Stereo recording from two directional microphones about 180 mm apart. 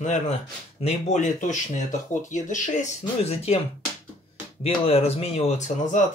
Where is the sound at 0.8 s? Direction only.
40° left (ahead or behind).